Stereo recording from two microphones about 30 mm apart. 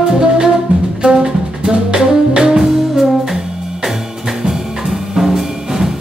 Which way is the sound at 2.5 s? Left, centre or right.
Centre.